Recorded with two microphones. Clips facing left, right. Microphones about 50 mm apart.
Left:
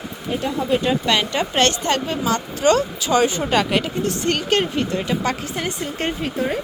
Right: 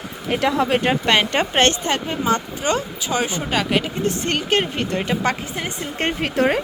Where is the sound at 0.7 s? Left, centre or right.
Right; by 3.4 s centre.